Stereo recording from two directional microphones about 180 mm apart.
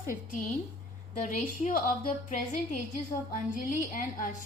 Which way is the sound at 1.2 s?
50° left (ahead or behind).